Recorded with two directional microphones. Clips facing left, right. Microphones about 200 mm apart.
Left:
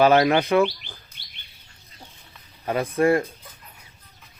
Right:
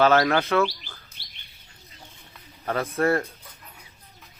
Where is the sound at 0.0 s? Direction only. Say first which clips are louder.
Left 3 dB; 15° left (ahead or behind).